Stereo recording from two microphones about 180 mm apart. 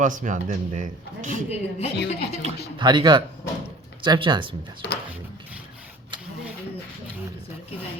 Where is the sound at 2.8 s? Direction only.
25° right (ahead or behind).